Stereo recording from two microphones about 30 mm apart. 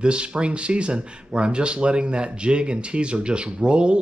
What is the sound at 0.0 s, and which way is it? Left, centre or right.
Speech, right.